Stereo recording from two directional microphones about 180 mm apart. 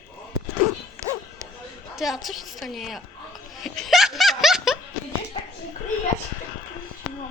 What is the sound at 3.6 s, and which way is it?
Laughter, centre (ahead or behind).